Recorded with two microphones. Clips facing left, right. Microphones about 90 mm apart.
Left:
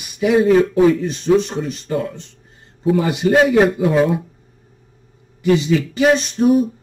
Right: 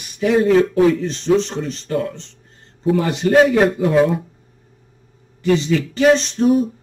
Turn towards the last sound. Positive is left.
turn(degrees=5)  # may be behind; listen again after turning